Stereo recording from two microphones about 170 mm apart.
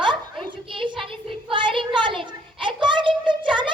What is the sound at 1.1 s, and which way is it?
Child singing, 30° right (ahead or behind).